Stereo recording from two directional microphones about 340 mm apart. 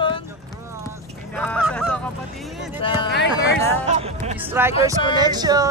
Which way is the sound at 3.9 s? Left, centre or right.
Centre.